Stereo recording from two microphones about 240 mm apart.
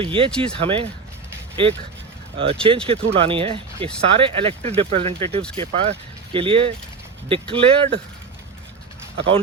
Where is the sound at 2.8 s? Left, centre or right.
Right.